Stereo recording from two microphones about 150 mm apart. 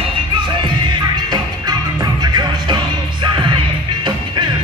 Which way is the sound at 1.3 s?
25° right (ahead or behind).